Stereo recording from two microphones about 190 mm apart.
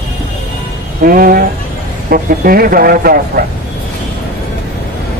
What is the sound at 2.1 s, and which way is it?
Speech, 50° right (ahead or behind).